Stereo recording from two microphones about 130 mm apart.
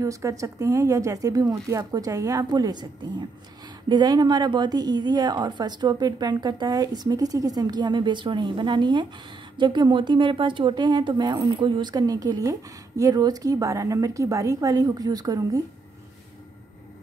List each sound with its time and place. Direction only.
0.0 s a woman's voice: 25° right (ahead or behind)